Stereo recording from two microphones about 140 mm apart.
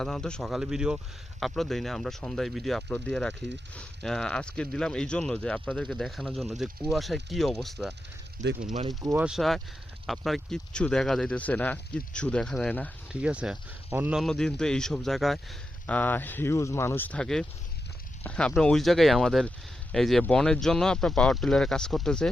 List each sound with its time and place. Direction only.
0.0 s speech: 5° left (ahead or behind)
8.4 s speech: 60° right (ahead or behind)
8.9 s speech: 30° right (ahead or behind)
9.1 s speech: 5° right (ahead or behind)
13.1 s speech: 10° right (ahead or behind)
14.2 s speech: 5° left (ahead or behind)
15.9 s speech: 10° left (ahead or behind)